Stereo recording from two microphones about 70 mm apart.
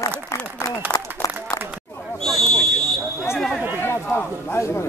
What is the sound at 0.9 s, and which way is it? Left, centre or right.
Speech, left.